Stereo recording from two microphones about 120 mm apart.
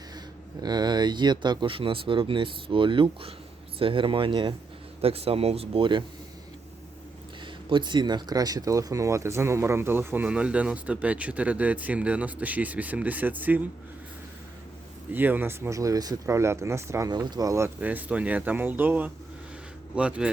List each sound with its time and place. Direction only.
0.6 s speech: 35° right (ahead or behind)
5.0 s speech: 55° right (ahead or behind)
7.4 s speech: 40° right (ahead or behind); by 13.7 s 15° right (ahead or behind)
15.1 s speech: 15° right (ahead or behind)
17.1 s speech: 35° right (ahead or behind)
17.7 s speech: 15° right (ahead or behind)